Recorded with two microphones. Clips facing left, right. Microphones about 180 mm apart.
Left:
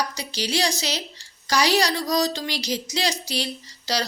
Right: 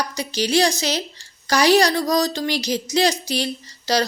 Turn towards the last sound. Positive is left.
turn(degrees=-50)  # may be behind; listen again after turning